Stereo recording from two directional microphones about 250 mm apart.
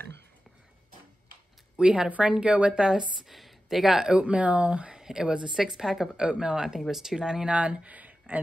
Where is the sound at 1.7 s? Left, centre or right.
Centre.